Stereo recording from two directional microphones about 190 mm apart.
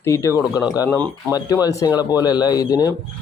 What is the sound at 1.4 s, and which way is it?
Speech, 20° left (ahead or behind).